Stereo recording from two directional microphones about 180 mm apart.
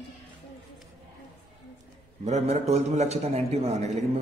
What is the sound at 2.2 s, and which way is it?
A man's voice, 40° right (ahead or behind).